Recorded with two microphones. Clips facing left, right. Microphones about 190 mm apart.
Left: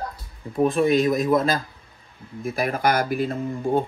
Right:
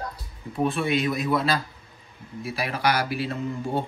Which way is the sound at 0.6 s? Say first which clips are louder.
Left 5 dB; 40° left (ahead or behind).